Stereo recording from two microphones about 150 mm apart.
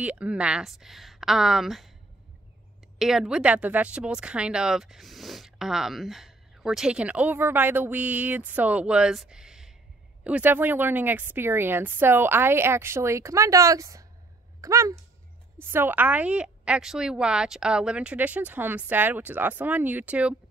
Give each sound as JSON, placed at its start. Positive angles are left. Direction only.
{"t": 0.0, "sound": "speech", "side_deg": -10}
{"t": 3.0, "sound": "a woman's voice", "side_deg": -5}